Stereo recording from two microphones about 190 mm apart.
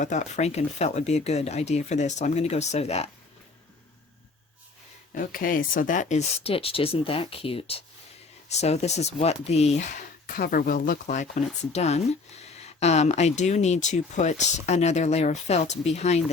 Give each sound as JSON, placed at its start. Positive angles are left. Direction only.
{"t": 0.0, "sound": "speech", "side_deg": 40}
{"t": 5.1, "sound": "speech", "side_deg": 50}